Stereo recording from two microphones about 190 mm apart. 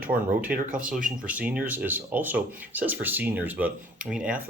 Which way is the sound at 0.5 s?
45° right (ahead or behind).